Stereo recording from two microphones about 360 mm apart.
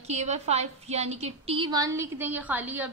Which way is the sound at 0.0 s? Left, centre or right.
Centre.